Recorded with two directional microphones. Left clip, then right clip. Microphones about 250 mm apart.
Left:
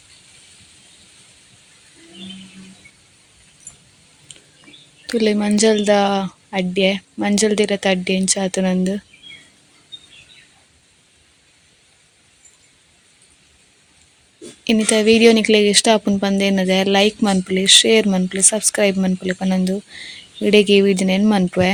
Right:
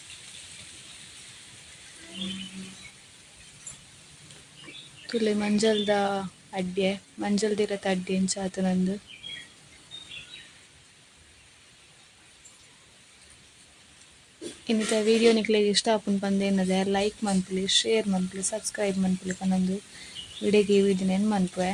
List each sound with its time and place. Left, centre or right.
5.0 s speech: left
14.7 s speech: left